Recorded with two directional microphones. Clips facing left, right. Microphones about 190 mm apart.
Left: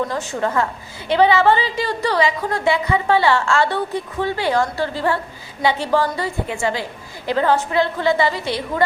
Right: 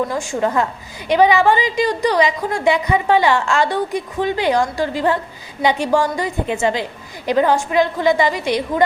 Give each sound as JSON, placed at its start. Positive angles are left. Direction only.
{"t": 0.1, "sound": "a woman's voice", "side_deg": -15}